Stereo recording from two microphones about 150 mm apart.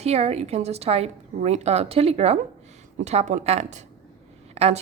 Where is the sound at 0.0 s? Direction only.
45° right (ahead or behind).